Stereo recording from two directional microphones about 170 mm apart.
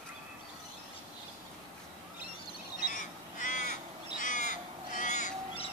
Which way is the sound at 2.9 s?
50° left (ahead or behind).